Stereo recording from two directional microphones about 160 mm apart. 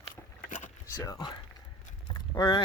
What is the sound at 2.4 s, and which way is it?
Speech, 25° left (ahead or behind).